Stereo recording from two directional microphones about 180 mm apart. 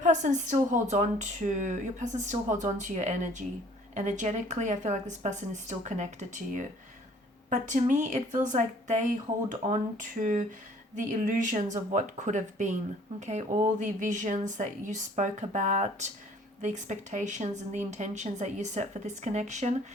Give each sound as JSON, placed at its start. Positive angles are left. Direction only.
{"t": 0.0, "sound": "speech", "side_deg": -45}